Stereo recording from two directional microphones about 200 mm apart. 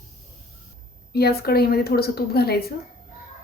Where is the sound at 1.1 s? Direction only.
50° left (ahead or behind).